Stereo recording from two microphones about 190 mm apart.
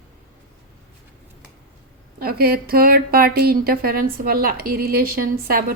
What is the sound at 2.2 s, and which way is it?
Speech, 50° right (ahead or behind).